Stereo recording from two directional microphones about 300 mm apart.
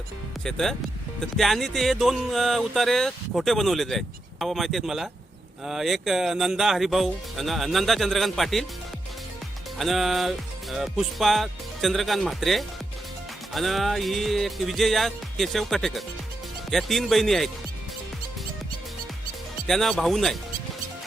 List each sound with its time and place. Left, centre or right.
0.4 s speech: centre
9.7 s speech: centre
19.6 s speech: centre